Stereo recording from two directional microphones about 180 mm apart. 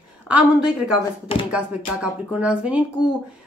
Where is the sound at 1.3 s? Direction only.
30° left (ahead or behind).